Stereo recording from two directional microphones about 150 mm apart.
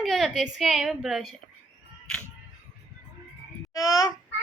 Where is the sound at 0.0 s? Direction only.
Centre (ahead or behind).